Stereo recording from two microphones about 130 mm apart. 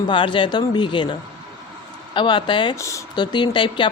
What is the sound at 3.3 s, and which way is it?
Speech, 40° left (ahead or behind).